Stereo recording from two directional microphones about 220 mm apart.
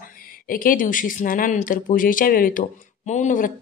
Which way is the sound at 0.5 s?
40° left (ahead or behind).